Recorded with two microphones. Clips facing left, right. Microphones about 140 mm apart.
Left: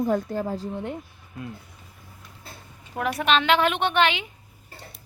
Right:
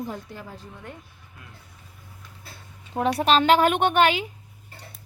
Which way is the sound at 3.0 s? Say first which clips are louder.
Right 3 dB; 35° right (ahead or behind).